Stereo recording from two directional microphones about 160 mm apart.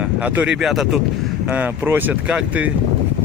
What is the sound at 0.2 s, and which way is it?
Speech, 10° right (ahead or behind).